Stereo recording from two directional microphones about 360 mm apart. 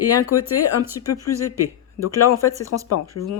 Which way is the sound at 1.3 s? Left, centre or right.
Centre.